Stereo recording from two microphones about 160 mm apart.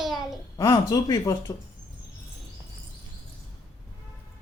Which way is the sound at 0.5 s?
20° left (ahead or behind).